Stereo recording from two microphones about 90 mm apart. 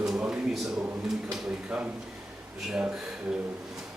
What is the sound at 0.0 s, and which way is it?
Speech, 5° right (ahead or behind).